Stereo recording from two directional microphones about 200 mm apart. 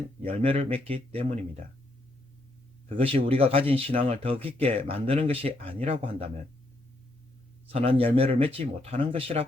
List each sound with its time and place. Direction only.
0.3 s speech: 30° right (ahead or behind)
3.0 s speech: 30° right (ahead or behind)
7.7 s speech: 30° right (ahead or behind)